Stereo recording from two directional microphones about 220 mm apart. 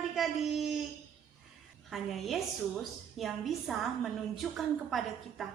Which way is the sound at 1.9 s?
Centre (ahead or behind).